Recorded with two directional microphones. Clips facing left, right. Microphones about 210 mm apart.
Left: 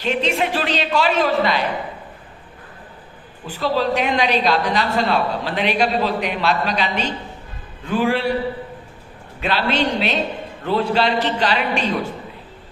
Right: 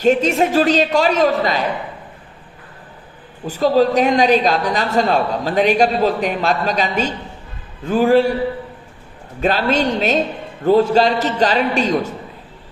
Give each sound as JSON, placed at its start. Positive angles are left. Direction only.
{"t": 0.0, "sound": "a woman's voice", "side_deg": -45}
{"t": 3.4, "sound": "a woman's voice", "side_deg": -40}
{"t": 9.4, "sound": "a woman's voice", "side_deg": -45}